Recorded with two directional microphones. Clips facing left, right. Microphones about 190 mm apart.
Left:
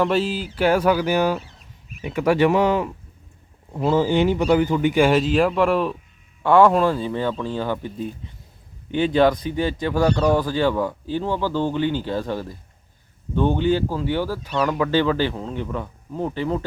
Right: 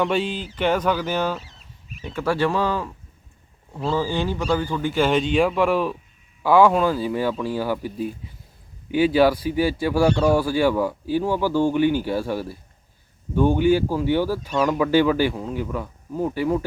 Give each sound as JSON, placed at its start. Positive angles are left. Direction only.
{"t": 0.0, "sound": "a man's voice", "side_deg": 0}